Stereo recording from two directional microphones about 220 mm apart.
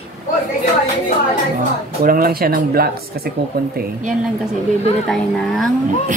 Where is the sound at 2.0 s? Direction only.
45° right (ahead or behind).